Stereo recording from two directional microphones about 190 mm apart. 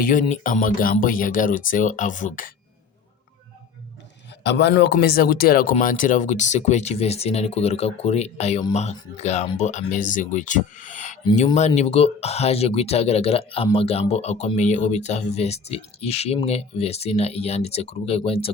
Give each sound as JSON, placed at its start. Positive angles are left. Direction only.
{"t": 0.0, "sound": "speech", "side_deg": 40}
{"t": 4.4, "sound": "speech", "side_deg": 65}